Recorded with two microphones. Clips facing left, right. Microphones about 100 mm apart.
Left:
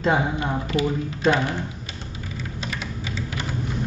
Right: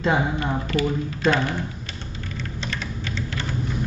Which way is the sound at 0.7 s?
15° left (ahead or behind).